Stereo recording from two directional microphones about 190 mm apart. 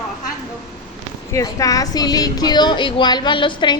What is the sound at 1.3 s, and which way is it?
A woman's voice, 20° left (ahead or behind).